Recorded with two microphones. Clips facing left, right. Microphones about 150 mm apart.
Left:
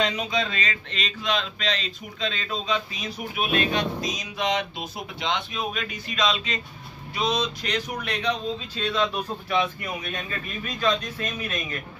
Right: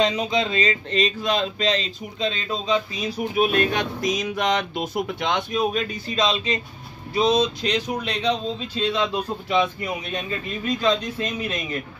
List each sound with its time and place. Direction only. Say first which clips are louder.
0.0 s speech: right 4 dB; 25° right (ahead or behind)
3.5 s speech: right 2 dB; 55° right (ahead or behind); by 11.6 s 25° right (ahead or behind)